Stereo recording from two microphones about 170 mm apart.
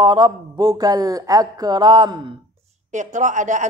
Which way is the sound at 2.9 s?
45° right (ahead or behind).